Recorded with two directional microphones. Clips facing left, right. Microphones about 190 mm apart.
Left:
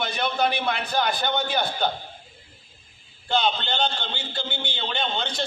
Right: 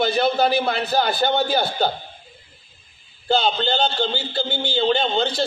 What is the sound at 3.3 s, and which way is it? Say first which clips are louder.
A man's voice: right 4 dB; 35° right (ahead or behind).